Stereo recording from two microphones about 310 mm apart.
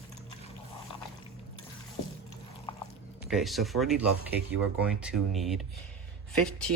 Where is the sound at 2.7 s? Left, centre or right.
Centre.